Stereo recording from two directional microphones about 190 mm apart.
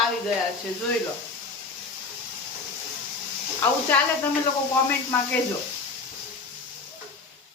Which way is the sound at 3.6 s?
10° left (ahead or behind).